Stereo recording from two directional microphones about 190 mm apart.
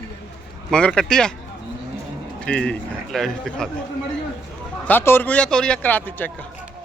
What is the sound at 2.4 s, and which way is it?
Speech, 5° left (ahead or behind).